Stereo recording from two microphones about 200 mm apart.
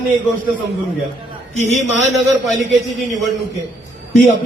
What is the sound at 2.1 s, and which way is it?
Speech, centre (ahead or behind).